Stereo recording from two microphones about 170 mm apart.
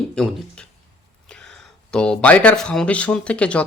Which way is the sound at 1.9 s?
5° left (ahead or behind).